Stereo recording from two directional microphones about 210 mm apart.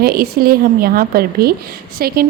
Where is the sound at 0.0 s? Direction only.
45° right (ahead or behind).